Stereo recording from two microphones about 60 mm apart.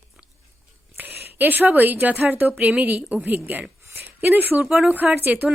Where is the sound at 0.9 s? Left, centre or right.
Right.